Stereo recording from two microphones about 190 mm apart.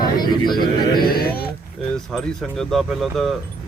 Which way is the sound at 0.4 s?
25° left (ahead or behind).